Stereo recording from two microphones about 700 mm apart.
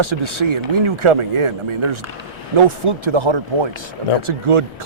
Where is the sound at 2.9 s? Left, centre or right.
Right.